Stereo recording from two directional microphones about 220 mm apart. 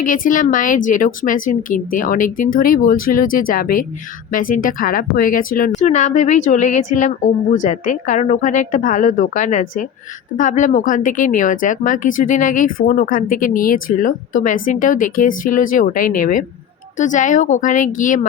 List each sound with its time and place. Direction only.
0.0 s speech: 35° left (ahead or behind)